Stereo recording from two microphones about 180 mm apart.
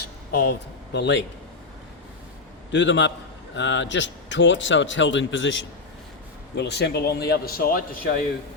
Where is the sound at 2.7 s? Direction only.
85° left.